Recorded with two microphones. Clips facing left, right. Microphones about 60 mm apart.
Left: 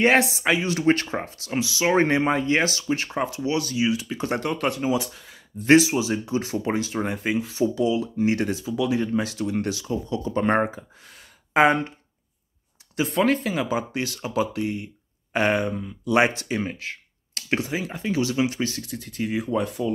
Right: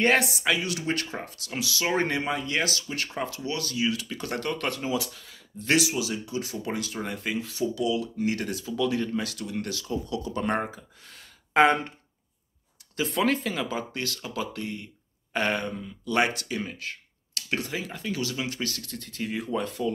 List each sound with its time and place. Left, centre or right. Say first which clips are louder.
0.0 s speech: left 4 dB; left
11.5 s speech: left 2 dB; centre
13.1 s speech: left 4 dB; centre
13.6 s speech: left 5 dB; centre
17.6 s speech: left 4 dB; centre